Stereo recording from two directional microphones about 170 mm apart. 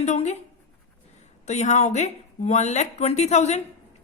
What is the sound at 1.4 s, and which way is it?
Speech, 45° left (ahead or behind).